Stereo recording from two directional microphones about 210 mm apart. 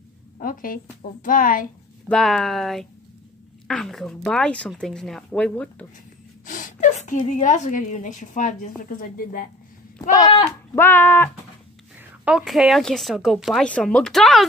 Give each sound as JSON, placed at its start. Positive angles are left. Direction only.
{"t": 0.4, "sound": "a woman's voice", "side_deg": 40}
{"t": 2.0, "sound": "speech", "side_deg": 5}
{"t": 6.4, "sound": "a woman's voice", "side_deg": 40}
{"t": 10.1, "sound": "speech", "side_deg": 15}
{"t": 12.0, "sound": "speech", "side_deg": -5}